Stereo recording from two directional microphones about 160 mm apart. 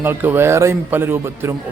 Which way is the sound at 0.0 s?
15° right (ahead or behind).